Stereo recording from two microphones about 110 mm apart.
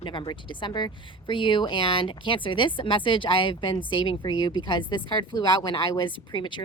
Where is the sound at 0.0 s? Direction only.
50° left (ahead or behind).